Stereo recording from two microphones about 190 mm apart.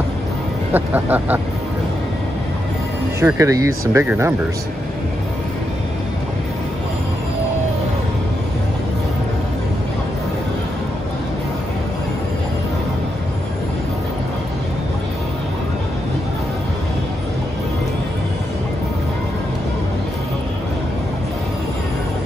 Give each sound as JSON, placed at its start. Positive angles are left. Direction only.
{"t": 0.7, "sound": "vehicle", "side_deg": -10}
{"t": 3.2, "sound": "vehicle", "side_deg": -15}